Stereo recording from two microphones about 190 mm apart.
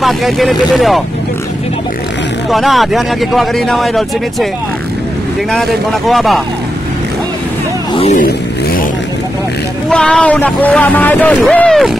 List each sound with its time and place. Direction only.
0.0 s speech: centre (ahead or behind)
2.5 s speech: centre (ahead or behind)
5.5 s speech: centre (ahead or behind)
7.9 s vehicle: 30° left (ahead or behind)
8.2 s vehicle: 50° left (ahead or behind)
9.8 s speech: 5° left (ahead or behind)